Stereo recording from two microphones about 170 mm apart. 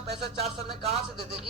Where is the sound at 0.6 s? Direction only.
35° right (ahead or behind).